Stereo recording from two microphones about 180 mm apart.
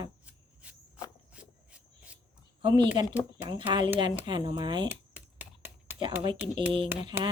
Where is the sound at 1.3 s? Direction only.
5° right (ahead or behind).